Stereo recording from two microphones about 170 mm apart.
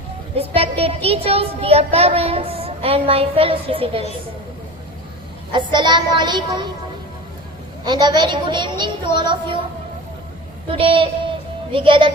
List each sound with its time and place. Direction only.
0.3 s a child's voice: 35° right (ahead or behind)
5.5 s a woman's voice: 25° right (ahead or behind)
7.9 s a woman's voice: 25° right (ahead or behind)
10.7 s a child's voice: 30° right (ahead or behind)